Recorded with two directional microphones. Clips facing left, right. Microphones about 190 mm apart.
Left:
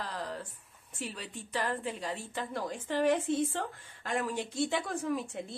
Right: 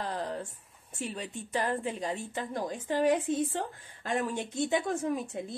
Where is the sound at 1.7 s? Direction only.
20° right (ahead or behind).